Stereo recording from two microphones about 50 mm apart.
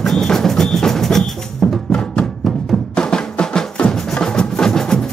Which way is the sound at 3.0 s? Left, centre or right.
Centre.